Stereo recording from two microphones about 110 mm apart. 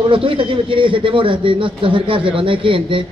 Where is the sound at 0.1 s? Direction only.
55° right (ahead or behind).